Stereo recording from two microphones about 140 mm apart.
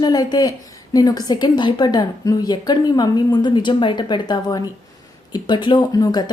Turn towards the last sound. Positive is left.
turn(degrees=30)  # may be behind; listen again after turning